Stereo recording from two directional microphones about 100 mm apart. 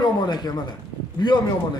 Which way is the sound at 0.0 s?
45° left (ahead or behind).